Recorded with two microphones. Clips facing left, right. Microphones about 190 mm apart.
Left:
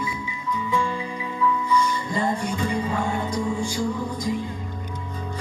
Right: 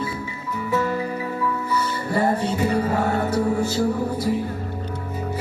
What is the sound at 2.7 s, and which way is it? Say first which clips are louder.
Music: right 4 dB; 40° right (ahead or behind).